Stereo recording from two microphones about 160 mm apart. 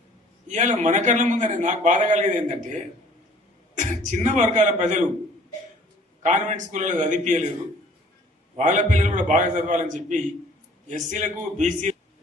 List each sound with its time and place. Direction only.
0.4 s a man's voice: 50° right (ahead or behind)
3.8 s a man's voice: 50° right (ahead or behind)
6.2 s a man's voice: 50° right (ahead or behind)
8.5 s a man's voice: 50° right (ahead or behind)